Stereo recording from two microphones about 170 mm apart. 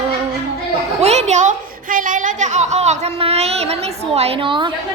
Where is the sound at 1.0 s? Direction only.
40° right (ahead or behind).